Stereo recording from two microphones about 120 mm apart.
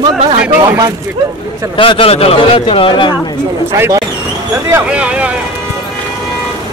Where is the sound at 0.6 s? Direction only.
30° right (ahead or behind).